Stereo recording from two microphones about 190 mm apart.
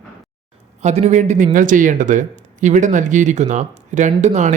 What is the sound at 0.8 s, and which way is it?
Speech, 35° right (ahead or behind).